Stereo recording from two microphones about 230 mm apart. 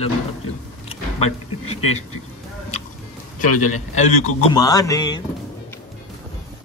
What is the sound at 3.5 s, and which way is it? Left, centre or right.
Speech, left.